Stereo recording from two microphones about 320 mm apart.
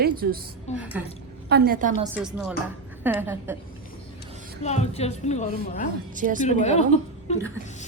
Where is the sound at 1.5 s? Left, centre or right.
Right.